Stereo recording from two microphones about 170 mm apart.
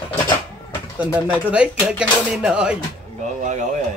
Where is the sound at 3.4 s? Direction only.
45° right (ahead or behind).